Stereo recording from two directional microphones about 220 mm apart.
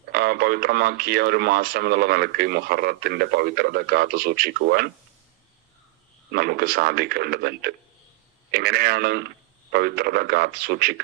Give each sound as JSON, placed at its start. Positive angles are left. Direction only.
{"t": 0.1, "sound": "speech", "side_deg": -45}
{"t": 6.3, "sound": "speech", "side_deg": -45}